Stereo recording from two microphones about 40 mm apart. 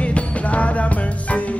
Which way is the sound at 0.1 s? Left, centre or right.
Left.